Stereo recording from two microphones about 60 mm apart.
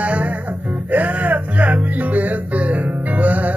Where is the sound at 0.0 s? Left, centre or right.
Right.